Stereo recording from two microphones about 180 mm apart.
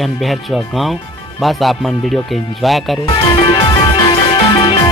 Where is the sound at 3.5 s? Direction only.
25° left (ahead or behind).